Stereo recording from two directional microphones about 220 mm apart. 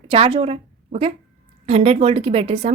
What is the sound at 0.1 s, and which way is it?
A woman's voice, 25° right (ahead or behind).